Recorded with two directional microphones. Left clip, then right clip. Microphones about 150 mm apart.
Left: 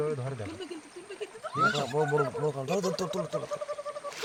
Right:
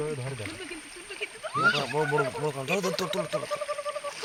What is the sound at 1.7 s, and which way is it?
Speech, 10° left (ahead or behind).